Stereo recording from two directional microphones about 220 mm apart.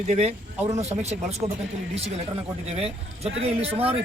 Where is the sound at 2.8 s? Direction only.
25° right (ahead or behind).